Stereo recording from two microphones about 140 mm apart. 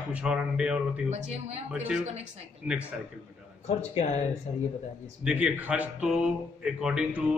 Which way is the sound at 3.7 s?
50° left (ahead or behind).